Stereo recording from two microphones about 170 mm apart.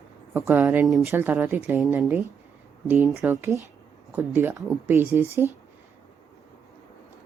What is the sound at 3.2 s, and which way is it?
Speech, 15° right (ahead or behind).